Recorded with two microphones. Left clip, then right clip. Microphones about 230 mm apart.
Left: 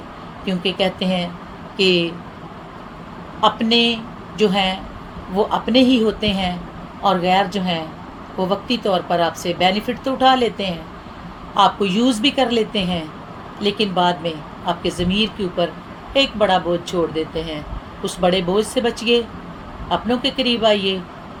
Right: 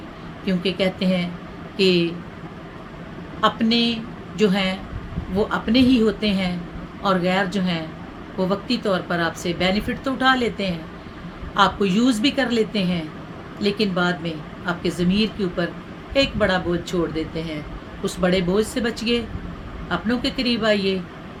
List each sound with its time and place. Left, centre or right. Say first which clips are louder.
0.4 s speech: left 2 dB; centre
3.4 s speech: left 4 dB; centre